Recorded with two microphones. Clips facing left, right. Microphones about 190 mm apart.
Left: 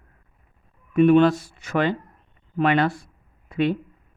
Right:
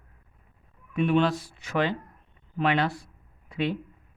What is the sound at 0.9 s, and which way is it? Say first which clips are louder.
Speech: left 8 dB; 50° left (ahead or behind).